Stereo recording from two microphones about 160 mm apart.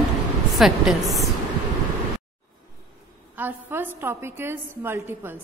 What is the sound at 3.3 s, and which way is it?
A woman's voice, 10° right (ahead or behind).